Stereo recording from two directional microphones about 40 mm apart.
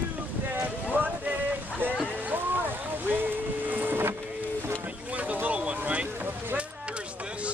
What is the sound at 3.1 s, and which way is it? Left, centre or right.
Boat, right.